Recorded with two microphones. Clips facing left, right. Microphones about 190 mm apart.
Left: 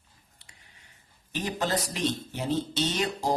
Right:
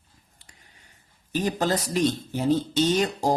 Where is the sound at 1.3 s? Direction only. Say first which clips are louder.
Right 5 dB; 40° right (ahead or behind).